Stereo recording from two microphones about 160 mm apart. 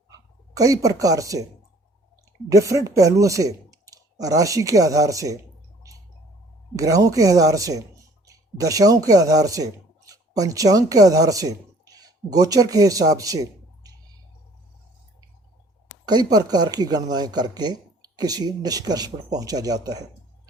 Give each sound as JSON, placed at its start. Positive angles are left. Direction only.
{"t": 0.5, "sound": "speech", "side_deg": -20}
{"t": 2.5, "sound": "speech", "side_deg": -20}
{"t": 6.7, "sound": "speech", "side_deg": -20}
{"t": 16.0, "sound": "speech", "side_deg": -25}